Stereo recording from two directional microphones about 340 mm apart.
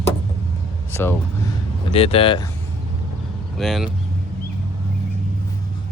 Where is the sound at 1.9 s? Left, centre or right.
Centre.